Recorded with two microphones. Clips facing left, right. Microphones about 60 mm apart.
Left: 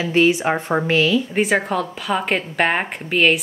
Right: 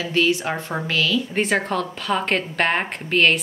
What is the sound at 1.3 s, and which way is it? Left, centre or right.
A woman's voice, centre.